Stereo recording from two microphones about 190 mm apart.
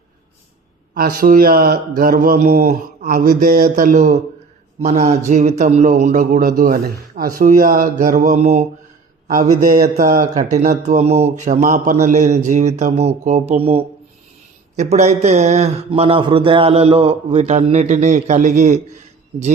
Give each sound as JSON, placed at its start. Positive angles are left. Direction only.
{"t": 0.9, "sound": "a man's voice", "side_deg": -50}
{"t": 9.6, "sound": "a man's voice", "side_deg": -55}